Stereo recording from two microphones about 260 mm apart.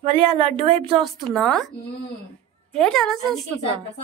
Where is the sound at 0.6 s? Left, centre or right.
Right.